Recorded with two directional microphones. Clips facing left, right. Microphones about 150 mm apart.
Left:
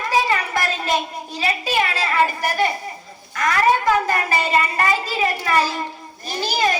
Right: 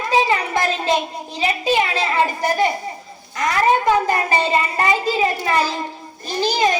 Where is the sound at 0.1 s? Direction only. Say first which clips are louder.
Right 2 dB; 20° right (ahead or behind).